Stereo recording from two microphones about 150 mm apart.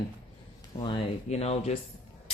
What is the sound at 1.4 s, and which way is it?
Speech, 45° left (ahead or behind).